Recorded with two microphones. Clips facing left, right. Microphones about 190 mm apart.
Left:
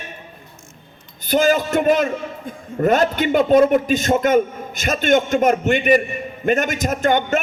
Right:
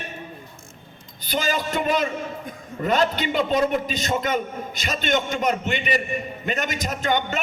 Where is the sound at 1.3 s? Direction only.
50° left (ahead or behind).